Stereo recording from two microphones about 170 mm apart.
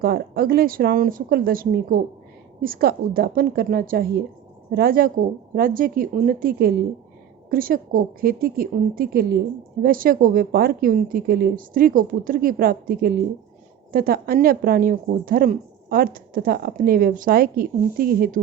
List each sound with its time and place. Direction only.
0.0 s a woman's voice: 60° right (ahead or behind)